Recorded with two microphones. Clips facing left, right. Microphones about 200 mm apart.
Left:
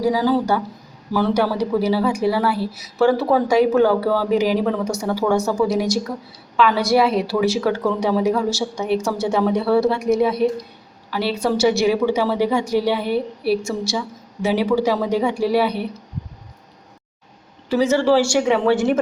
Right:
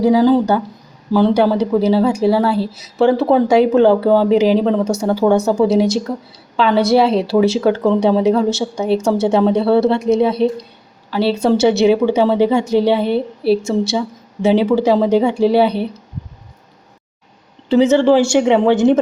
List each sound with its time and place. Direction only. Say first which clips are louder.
0.0 s a woman's voice: right 6 dB; 25° right (ahead or behind)
17.7 s a woman's voice: right 5 dB; 20° right (ahead or behind)